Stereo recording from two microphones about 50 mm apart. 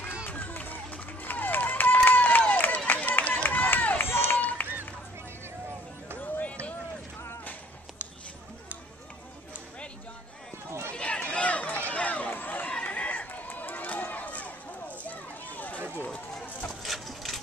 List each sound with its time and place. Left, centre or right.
0.3 s run: left
2.0 s a sound: left
2.9 s run: left
6.1 s run: left
6.4 s run: left
10.9 s run: left
12.7 s run: left
16.8 s a sound: centre